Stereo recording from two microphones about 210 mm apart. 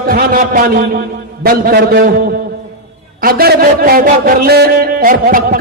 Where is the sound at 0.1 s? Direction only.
40° right (ahead or behind).